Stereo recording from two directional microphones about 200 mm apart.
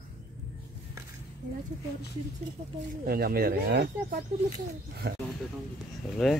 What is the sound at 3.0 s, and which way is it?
Speech, 50° right (ahead or behind).